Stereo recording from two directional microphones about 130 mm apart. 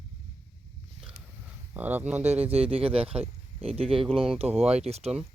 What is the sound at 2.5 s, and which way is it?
Speech, 50° right (ahead or behind).